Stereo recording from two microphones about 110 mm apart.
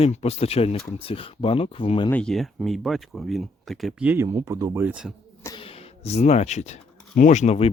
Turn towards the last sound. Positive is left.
turn(degrees=85)